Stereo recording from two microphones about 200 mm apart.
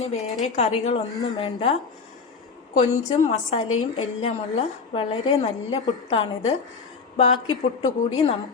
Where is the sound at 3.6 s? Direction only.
90° left.